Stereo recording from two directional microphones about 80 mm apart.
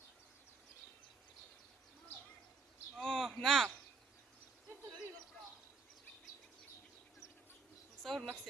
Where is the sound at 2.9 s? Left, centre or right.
Centre.